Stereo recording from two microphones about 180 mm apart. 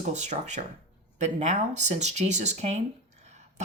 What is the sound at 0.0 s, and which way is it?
A woman's voice, 40° right (ahead or behind).